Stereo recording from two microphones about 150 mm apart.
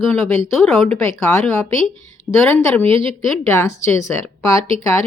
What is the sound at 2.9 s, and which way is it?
Speech, 35° right (ahead or behind).